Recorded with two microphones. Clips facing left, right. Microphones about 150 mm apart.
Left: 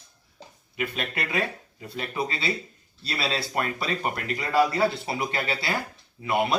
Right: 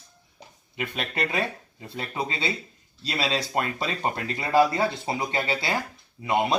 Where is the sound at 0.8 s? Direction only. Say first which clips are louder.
Right 1 dB; 30° right (ahead or behind).